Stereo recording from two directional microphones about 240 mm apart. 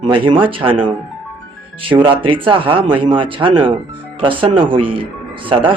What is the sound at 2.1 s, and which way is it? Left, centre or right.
Speech, right.